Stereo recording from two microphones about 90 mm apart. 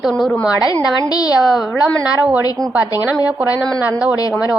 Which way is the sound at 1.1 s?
45° left (ahead or behind).